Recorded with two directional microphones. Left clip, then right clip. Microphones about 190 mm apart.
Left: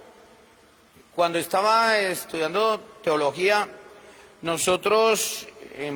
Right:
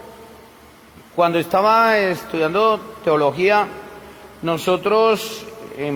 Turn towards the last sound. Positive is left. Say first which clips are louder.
# right 7 dB
turn(degrees=40)  # may be behind; listen again after turning